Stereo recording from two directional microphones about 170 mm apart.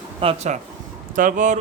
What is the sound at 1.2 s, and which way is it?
Speech, 50° right (ahead or behind).